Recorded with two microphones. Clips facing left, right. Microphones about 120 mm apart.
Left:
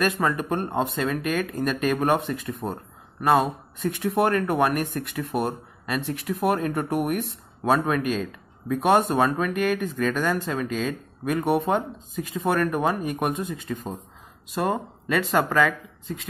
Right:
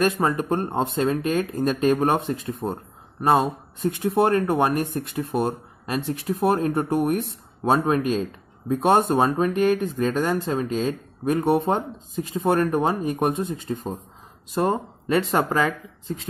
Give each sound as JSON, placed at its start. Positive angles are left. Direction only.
{"t": 0.0, "sound": "speech", "side_deg": -30}